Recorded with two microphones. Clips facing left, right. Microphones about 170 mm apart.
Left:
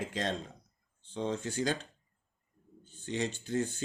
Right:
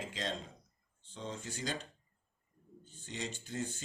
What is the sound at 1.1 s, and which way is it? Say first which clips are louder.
Speech: left 10 dB; 65° left (ahead or behind).